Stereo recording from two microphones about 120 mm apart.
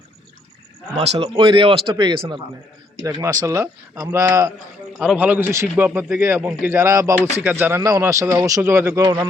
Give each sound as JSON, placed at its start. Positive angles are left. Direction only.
{"t": 0.9, "sound": "speech", "side_deg": -60}
{"t": 1.4, "sound": "speech", "side_deg": -45}
{"t": 3.2, "sound": "a man's voice", "side_deg": -25}
{"t": 4.9, "sound": "a man's voice", "side_deg": -10}